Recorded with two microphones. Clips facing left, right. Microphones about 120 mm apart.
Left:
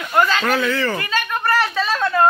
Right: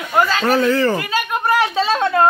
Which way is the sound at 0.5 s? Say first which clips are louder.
Right 4 dB; 35° right (ahead or behind).